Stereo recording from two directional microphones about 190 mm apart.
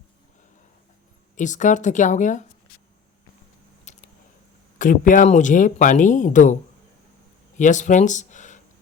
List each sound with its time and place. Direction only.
1.4 s speech: 40° left (ahead or behind)
3.9 s a sound: 40° left (ahead or behind)
4.8 s speech: 45° left (ahead or behind)